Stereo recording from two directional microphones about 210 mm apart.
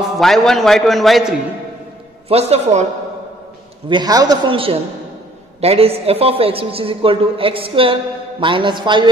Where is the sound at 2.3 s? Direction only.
30° right (ahead or behind).